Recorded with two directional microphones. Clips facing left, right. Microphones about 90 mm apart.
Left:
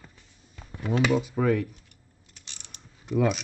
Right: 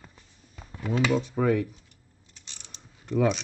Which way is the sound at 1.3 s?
5° right (ahead or behind).